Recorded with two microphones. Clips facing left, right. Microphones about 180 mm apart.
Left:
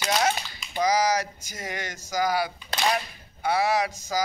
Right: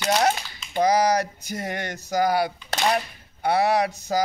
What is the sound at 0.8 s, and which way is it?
Speech, 60° right (ahead or behind).